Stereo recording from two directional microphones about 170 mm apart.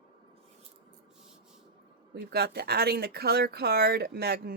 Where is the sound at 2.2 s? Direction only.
70° right (ahead or behind).